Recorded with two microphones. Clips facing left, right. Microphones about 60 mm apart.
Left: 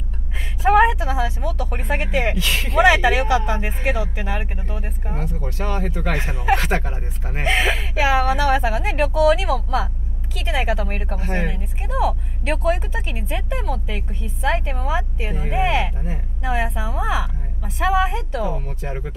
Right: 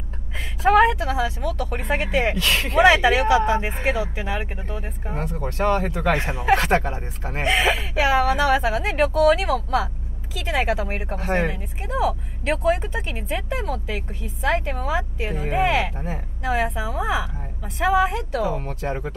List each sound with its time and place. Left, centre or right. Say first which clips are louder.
0.6 s speech: left 1 dB; centre
2.3 s speech: right 1 dB; right
2.8 s speech: even; centre
5.2 s speech: right 6 dB; right
7.5 s speech: even; centre
10.9 s speech: even; centre
11.1 s speech: right 4 dB; right
11.5 s speech: left 1 dB; centre
15.3 s speech: right 1 dB; right
15.8 s speech: even; right
16.4 s speech: right 1 dB; centre
18.6 s speech: right 3 dB; right